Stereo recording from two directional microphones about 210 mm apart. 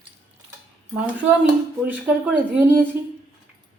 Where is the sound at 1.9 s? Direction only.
10° right (ahead or behind).